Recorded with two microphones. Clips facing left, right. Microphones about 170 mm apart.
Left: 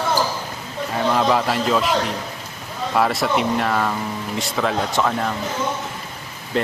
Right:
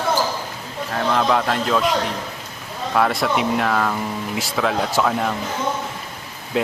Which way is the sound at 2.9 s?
Centre (ahead or behind).